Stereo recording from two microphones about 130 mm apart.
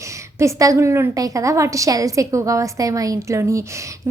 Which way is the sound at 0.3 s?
25° right (ahead or behind).